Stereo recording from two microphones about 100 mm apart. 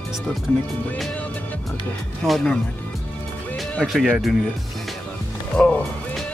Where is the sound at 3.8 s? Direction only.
Centre (ahead or behind).